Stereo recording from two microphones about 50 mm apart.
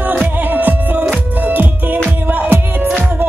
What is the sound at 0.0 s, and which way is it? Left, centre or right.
Music, right.